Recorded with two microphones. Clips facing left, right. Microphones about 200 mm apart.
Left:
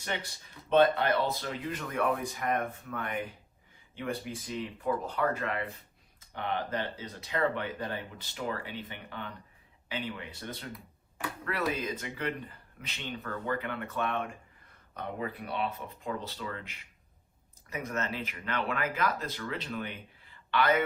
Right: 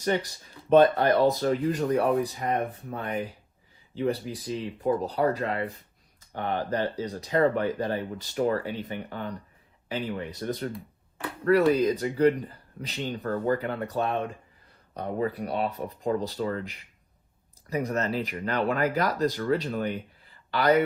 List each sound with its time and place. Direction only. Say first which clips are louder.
0.7 s speech: right 5 dB; 40° right (ahead or behind); by 3.2 s 25° right (ahead or behind)
3.9 s speech: right 8 dB; 35° right (ahead or behind)